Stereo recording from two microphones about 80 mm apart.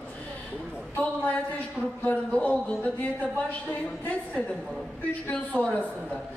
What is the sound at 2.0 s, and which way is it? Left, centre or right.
Speech, centre.